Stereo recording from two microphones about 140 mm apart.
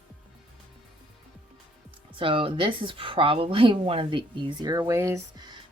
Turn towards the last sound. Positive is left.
turn(degrees=-20)  # may be behind; listen again after turning